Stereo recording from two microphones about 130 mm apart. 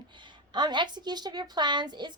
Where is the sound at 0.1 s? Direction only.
35° right (ahead or behind).